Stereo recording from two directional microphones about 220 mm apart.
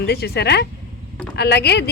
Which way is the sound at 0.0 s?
50° left (ahead or behind).